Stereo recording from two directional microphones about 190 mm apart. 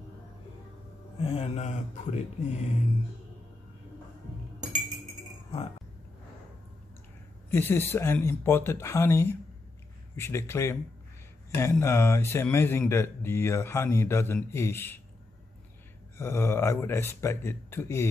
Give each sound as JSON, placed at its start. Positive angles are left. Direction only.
{"t": 1.2, "sound": "speech", "side_deg": 30}
{"t": 7.5, "sound": "speech", "side_deg": 10}
{"t": 16.2, "sound": "speech", "side_deg": 15}